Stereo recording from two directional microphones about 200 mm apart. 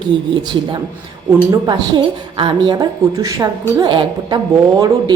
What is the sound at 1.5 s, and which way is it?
A woman's voice, 20° right (ahead or behind).